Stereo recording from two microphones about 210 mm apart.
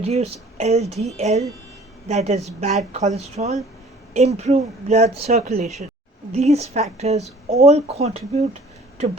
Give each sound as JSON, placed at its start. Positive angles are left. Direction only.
{"t": 0.0, "sound": "speech", "side_deg": -30}